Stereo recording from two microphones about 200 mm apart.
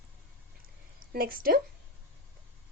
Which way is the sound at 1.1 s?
45° right (ahead or behind).